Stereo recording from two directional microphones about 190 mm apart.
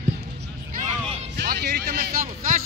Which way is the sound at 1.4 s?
60° right (ahead or behind).